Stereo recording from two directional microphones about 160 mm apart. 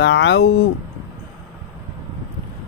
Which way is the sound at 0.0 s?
90° left.